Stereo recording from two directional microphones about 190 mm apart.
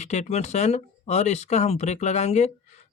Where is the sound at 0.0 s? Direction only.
35° left (ahead or behind).